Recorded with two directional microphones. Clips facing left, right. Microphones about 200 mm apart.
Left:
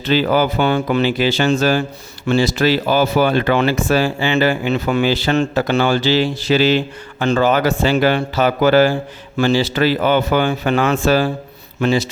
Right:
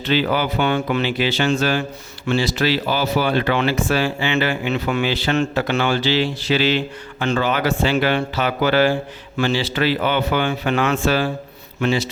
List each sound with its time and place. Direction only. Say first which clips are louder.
0.0 s speech: left 4 dB; 40° left (ahead or behind)